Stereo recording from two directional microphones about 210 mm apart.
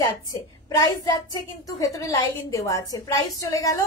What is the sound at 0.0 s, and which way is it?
A woman's voice, 20° left (ahead or behind).